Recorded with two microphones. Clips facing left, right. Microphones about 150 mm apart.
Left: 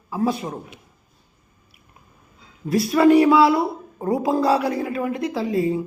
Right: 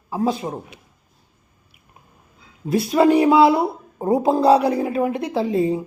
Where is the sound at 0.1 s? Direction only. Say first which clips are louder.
Right 1 dB; 20° right (ahead or behind).